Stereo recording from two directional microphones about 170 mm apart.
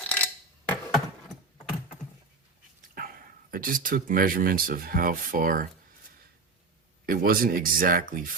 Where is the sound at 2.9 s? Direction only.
60° right (ahead or behind).